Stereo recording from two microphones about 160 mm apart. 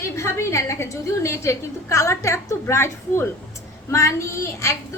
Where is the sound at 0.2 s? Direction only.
20° left (ahead or behind).